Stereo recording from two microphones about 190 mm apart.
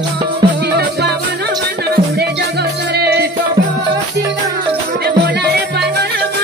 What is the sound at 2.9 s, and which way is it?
Music, 60° right (ahead or behind).